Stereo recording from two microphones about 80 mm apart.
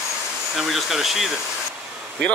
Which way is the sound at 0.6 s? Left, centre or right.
Centre.